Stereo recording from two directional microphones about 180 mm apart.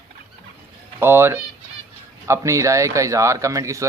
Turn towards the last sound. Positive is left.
turn(degrees=-15)  # may be behind; listen again after turning